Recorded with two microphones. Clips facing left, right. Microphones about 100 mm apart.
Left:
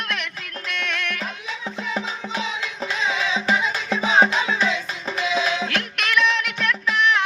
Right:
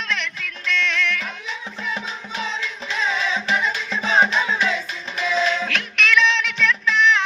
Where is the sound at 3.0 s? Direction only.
15° left (ahead or behind).